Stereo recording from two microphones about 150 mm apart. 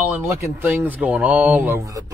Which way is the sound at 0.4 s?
15° right (ahead or behind).